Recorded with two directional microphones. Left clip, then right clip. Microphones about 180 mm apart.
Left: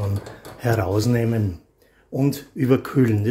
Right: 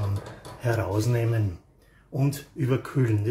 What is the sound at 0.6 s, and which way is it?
Speech, 40° left (ahead or behind).